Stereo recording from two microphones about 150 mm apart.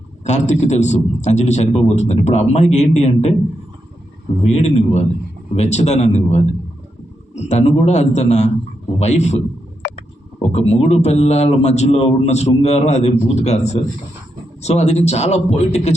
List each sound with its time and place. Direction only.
0.3 s a man's voice: 50° left (ahead or behind)
4.4 s a man's voice: 45° left (ahead or behind)
10.5 s a man's voice: 45° left (ahead or behind)